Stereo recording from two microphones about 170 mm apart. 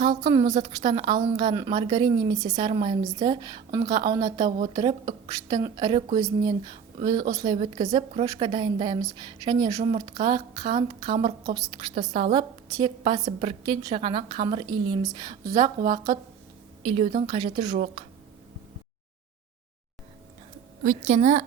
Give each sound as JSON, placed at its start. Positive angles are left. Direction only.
{"t": 0.0, "sound": "a woman's voice", "side_deg": -30}
{"t": 20.8, "sound": "a woman's voice", "side_deg": -45}